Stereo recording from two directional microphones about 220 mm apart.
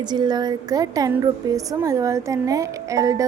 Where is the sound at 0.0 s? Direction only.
20° right (ahead or behind).